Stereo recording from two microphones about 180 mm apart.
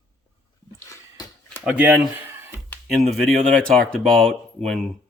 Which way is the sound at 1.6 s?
10° right (ahead or behind).